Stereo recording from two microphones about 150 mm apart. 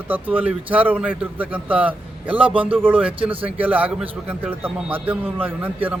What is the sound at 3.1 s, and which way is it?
Speech, 35° right (ahead or behind).